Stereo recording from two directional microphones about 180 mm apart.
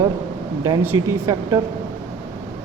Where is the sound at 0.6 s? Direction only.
15° right (ahead or behind).